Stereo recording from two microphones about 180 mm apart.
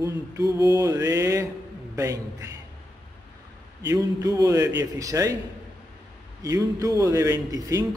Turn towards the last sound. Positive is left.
turn(degrees=-20)  # may be behind; listen again after turning